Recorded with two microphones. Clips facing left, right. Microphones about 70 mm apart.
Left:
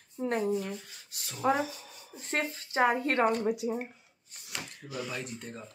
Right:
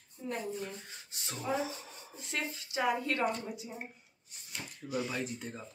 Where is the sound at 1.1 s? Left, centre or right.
Right.